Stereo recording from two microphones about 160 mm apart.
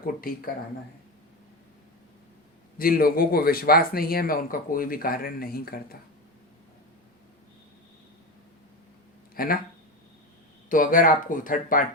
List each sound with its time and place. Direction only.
0.0 s speech: 65° left (ahead or behind)
2.7 s speech: 65° left (ahead or behind)
9.3 s speech: 65° left (ahead or behind)
10.7 s speech: 60° left (ahead or behind)